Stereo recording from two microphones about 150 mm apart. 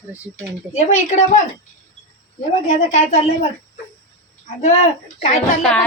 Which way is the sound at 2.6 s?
55° left (ahead or behind).